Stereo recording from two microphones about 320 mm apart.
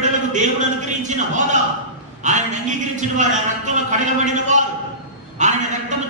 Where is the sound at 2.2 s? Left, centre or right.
Right.